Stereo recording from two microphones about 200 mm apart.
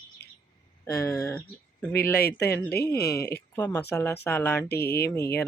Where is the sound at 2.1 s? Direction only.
50° left (ahead or behind).